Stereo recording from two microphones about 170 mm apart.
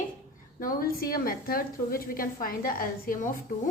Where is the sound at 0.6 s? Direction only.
60° left (ahead or behind).